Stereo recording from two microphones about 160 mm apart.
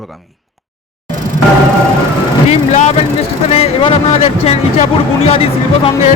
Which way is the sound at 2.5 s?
45° left (ahead or behind).